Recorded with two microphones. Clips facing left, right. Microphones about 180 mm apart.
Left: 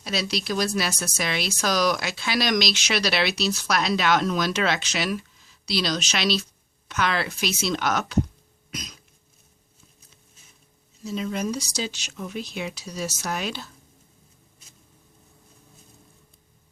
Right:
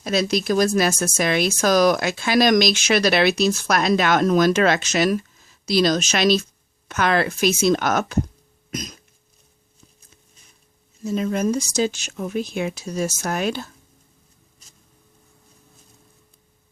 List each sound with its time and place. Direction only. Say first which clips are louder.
0.0 s speech: right 7 dB; 50° right (ahead or behind)
8.7 s cough: right 7 dB; 45° right (ahead or behind)
11.0 s speech: right 6 dB; 50° right (ahead or behind)